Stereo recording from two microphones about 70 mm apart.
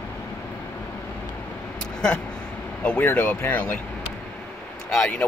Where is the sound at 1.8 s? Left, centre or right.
Centre.